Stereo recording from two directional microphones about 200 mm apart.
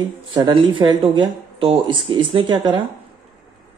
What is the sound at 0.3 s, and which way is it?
Speech, 25° right (ahead or behind).